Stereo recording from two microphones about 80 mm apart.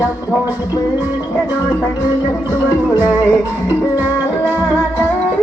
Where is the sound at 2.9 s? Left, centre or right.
Centre.